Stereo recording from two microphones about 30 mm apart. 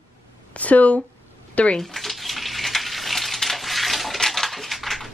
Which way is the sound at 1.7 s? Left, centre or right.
Centre.